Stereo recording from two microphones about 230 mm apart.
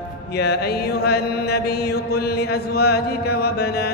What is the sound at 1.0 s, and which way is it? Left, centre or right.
Chant, left.